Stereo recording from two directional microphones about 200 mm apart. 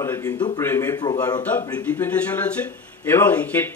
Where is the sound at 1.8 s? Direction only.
10° left (ahead or behind).